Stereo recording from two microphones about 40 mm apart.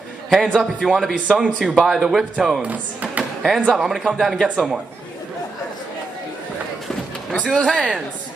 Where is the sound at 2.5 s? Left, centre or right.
Right.